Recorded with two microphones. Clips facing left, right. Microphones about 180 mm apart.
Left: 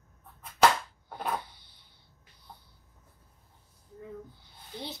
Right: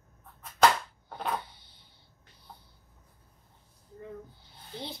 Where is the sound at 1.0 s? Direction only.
10° left (ahead or behind).